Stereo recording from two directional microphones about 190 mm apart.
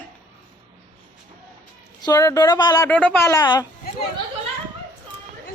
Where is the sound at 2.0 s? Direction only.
20° left (ahead or behind).